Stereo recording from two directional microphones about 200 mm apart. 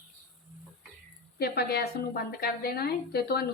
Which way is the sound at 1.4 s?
50° left (ahead or behind).